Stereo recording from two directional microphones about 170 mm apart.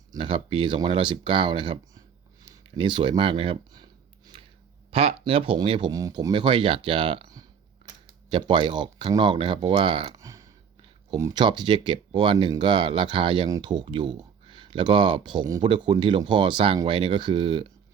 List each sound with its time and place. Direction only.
0.1 s speech: 30° right (ahead or behind)
4.9 s speech: 35° right (ahead or behind)
10.2 s a sound: 20° right (ahead or behind)
11.1 s speech: 25° right (ahead or behind)